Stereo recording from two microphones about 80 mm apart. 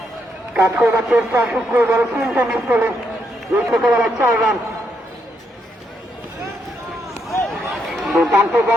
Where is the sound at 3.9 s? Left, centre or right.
Right.